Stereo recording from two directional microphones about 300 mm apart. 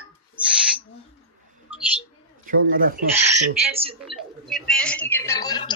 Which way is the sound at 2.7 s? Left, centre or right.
Right.